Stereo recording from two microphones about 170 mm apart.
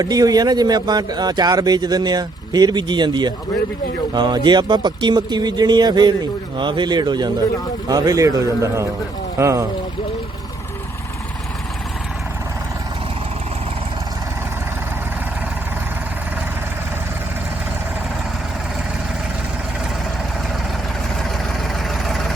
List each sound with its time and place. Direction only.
0.0 s a man's voice: 20° right (ahead or behind)
22.0 s vehicle: centre (ahead or behind)